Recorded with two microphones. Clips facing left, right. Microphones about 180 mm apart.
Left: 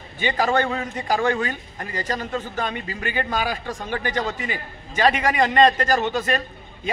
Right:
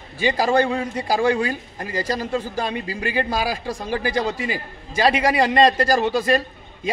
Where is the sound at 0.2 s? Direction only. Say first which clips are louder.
Right 3 dB; 35° right (ahead or behind).